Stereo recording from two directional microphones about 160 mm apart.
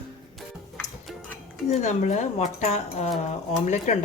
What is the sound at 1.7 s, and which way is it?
A woman's voice, 45° left (ahead or behind).